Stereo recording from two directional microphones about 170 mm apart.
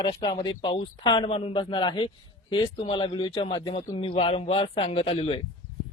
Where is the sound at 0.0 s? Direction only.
25° left (ahead or behind).